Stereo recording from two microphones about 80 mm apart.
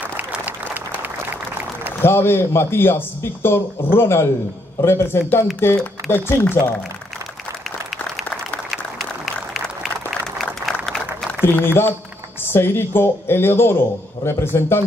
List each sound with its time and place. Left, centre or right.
2.0 s speech: left
10.4 s applause: centre
11.4 s speech: left